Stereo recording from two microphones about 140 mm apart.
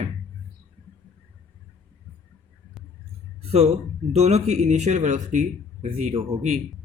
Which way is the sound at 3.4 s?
45° right (ahead or behind).